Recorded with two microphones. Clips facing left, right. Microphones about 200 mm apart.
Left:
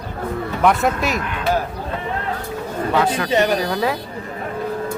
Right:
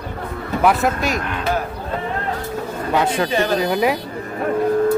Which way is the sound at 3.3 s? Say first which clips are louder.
Left 2 dB; 20° left (ahead or behind).